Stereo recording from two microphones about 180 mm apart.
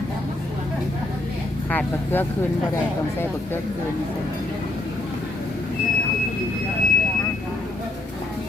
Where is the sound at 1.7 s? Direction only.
10° left (ahead or behind).